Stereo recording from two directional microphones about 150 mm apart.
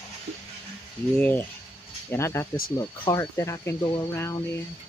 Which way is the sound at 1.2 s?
15° left (ahead or behind).